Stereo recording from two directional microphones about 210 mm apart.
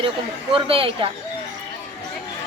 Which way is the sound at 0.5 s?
25° right (ahead or behind).